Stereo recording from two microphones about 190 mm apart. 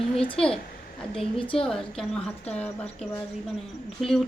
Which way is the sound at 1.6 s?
5° left (ahead or behind).